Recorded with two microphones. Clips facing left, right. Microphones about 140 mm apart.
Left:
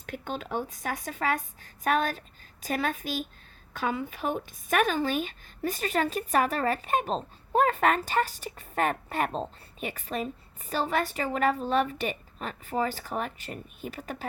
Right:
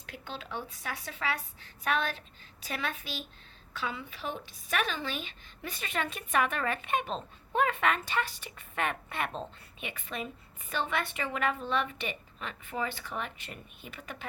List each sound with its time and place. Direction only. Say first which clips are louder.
0.0 s a woman's voice: left 7 dB; 50° left (ahead or behind)